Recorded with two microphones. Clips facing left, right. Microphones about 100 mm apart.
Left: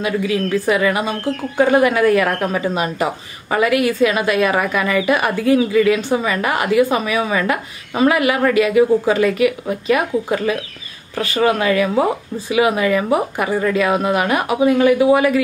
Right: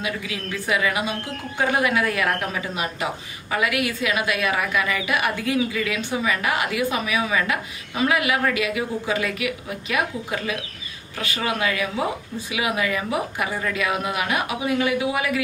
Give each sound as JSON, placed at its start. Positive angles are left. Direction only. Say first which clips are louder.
{"t": 0.0, "sound": "a woman's voice", "louder": "left 10 dB", "side_deg": 40}